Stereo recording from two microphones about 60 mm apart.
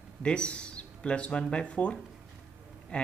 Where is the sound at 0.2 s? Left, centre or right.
Centre.